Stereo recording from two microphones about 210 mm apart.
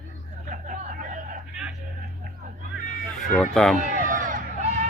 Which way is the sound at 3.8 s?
35° right (ahead or behind).